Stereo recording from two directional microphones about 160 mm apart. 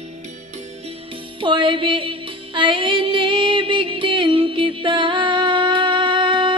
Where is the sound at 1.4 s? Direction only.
30° right (ahead or behind).